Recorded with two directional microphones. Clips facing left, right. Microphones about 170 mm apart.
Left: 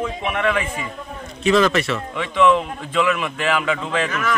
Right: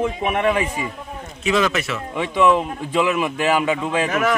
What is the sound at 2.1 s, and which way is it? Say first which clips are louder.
A man's voice: even; 15° right (ahead or behind).